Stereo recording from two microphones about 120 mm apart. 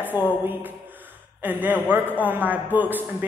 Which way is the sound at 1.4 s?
15° right (ahead or behind).